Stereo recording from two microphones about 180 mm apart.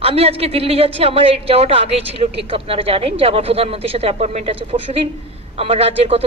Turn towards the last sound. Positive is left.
turn(degrees=-35)  # may be behind; listen again after turning